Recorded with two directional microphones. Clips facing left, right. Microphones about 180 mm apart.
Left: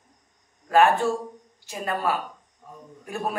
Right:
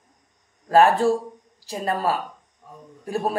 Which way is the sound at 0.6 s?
35° right (ahead or behind).